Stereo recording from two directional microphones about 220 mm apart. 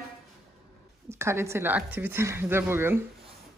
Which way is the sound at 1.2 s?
10° right (ahead or behind).